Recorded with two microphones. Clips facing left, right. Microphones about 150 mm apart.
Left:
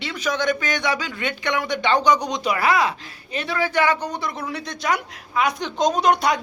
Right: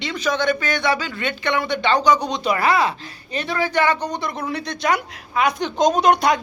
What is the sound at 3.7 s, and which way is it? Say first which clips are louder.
Speech: right 1 dB; 10° left (ahead or behind).